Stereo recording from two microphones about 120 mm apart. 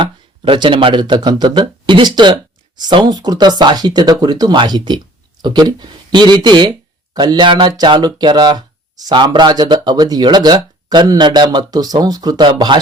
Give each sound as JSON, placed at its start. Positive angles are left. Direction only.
{"t": 0.0, "sound": "speech", "side_deg": -45}